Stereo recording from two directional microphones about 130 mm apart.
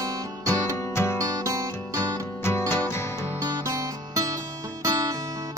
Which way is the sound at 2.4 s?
20° left (ahead or behind).